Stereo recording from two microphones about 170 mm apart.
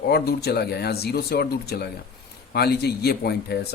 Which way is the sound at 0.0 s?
70° left (ahead or behind).